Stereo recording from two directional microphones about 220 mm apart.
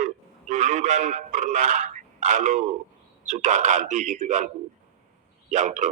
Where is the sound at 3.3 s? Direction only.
35° right (ahead or behind).